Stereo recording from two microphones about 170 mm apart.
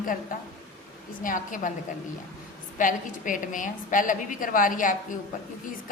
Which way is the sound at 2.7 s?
50° left (ahead or behind).